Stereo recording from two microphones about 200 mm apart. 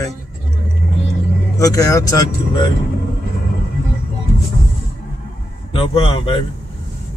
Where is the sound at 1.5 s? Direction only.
15° left (ahead or behind).